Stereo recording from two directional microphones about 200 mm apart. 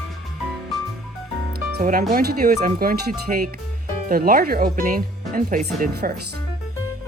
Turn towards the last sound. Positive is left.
turn(degrees=-40)  # may be behind; listen again after turning